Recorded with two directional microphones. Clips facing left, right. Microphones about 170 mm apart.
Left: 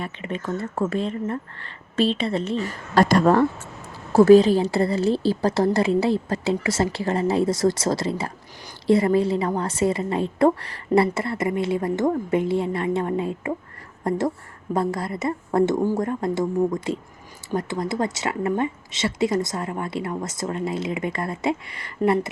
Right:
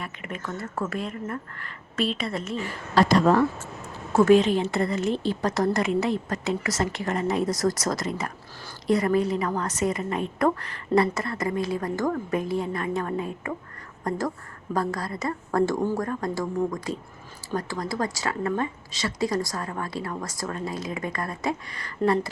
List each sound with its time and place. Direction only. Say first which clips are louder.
0.0 s a woman's voice: left 5 dB; 30° left (ahead or behind); by 3.4 s 50° left (ahead or behind)
4.1 s a woman's voice: left 5 dB; 35° left (ahead or behind)